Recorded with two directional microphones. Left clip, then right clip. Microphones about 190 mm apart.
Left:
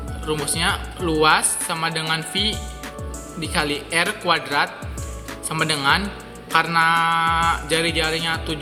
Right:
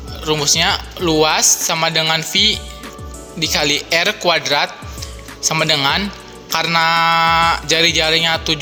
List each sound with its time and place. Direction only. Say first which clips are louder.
0.3 s speech: right 7 dB; 40° right (ahead or behind)